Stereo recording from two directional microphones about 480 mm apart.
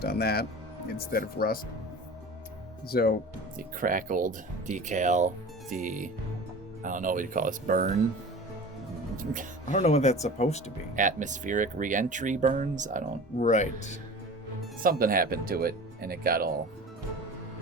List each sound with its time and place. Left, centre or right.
0.0 s speech: centre
2.9 s speech: centre
3.8 s speech: centre
9.1 s speech: centre
9.7 s speech: centre
10.9 s speech: centre
13.4 s speech: centre
14.8 s speech: centre